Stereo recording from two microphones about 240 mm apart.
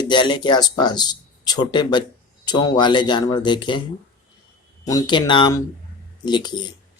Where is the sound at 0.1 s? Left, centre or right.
Centre.